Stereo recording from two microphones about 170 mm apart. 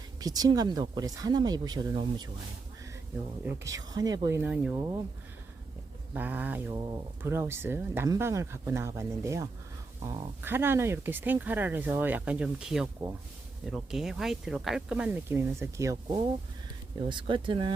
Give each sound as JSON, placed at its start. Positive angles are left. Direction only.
{"t": 0.2, "sound": "speech", "side_deg": -20}
{"t": 3.6, "sound": "speech", "side_deg": -20}
{"t": 6.1, "sound": "speech", "side_deg": -10}